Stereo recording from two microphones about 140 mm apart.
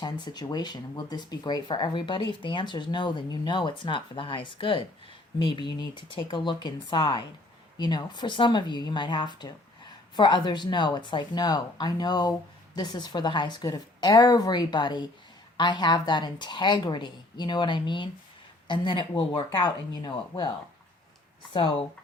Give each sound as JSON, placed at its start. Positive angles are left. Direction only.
{"t": 0.0, "sound": "speech", "side_deg": 30}